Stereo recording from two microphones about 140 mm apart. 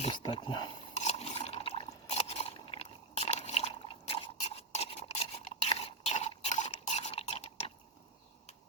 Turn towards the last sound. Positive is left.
turn(degrees=45)  # may be behind; listen again after turning